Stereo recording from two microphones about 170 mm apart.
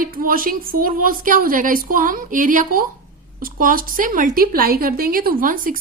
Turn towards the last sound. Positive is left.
turn(degrees=-50)  # may be behind; listen again after turning